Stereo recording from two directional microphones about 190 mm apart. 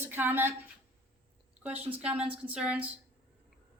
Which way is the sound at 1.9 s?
5° right (ahead or behind).